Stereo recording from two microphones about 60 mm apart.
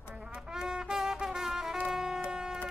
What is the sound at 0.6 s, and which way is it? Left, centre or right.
Music, centre.